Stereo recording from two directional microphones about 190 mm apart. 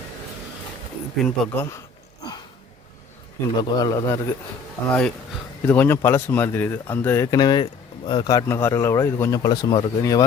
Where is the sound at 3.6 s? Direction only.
20° left (ahead or behind).